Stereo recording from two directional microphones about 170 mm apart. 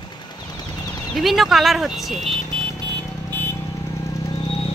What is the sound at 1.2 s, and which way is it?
Speech, centre (ahead or behind).